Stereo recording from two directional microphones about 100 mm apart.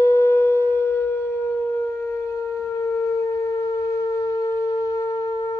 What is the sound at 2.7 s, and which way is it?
Shofar, 30° left (ahead or behind).